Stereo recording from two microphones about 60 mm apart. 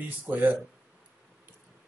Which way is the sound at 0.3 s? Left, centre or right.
Right.